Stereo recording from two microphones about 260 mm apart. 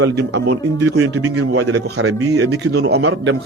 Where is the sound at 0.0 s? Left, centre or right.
Right.